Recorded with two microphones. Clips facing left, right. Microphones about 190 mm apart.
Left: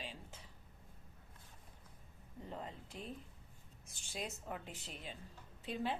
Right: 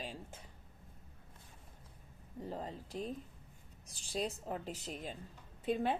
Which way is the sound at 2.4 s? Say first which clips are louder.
Right 5 dB; 35° right (ahead or behind).